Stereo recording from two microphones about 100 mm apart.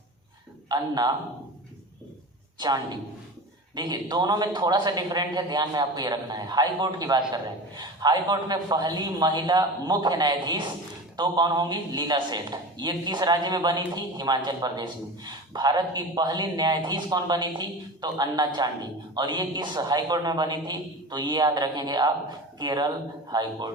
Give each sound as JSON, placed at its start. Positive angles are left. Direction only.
{"t": 0.7, "sound": "speech", "side_deg": -45}
{"t": 2.6, "sound": "speech", "side_deg": -45}